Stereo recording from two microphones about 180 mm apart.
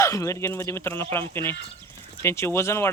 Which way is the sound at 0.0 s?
15° left (ahead or behind).